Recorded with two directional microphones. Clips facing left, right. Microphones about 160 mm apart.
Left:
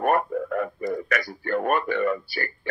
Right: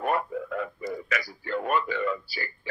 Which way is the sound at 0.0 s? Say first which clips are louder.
Left 5 dB; 50° left (ahead or behind).